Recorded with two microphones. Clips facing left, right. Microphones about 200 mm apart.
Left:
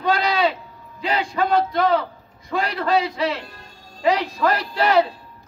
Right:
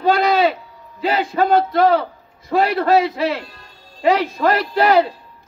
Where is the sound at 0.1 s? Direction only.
55° right (ahead or behind).